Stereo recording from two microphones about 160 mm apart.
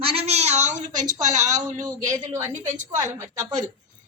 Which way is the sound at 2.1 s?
20° right (ahead or behind).